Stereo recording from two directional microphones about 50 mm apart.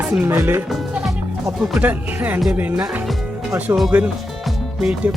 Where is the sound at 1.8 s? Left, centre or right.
Right.